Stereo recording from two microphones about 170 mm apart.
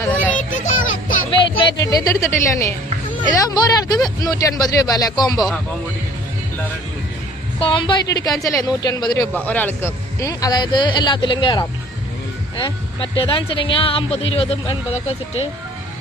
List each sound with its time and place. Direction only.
0.1 s children playing: 10° left (ahead or behind)
1.3 s a woman's voice: 30° left (ahead or behind)
7.6 s speech: 30° left (ahead or behind)
9.3 s speech: 10° left (ahead or behind); by 15.4 s 35° left (ahead or behind)